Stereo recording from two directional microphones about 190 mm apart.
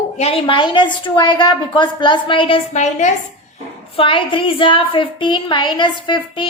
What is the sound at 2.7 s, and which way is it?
Speech, 40° left (ahead or behind).